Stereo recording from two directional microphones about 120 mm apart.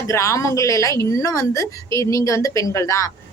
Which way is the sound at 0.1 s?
25° left (ahead or behind).